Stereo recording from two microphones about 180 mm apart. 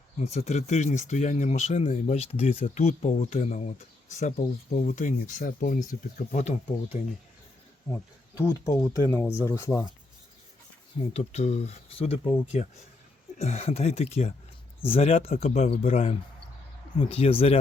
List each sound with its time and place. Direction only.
0.2 s speech: 35° left (ahead or behind)
8.4 s speech: 15° left (ahead or behind)
11.1 s speech: 40° left (ahead or behind)